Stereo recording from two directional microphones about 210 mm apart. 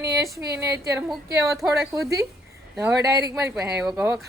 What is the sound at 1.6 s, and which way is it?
Speech, centre (ahead or behind).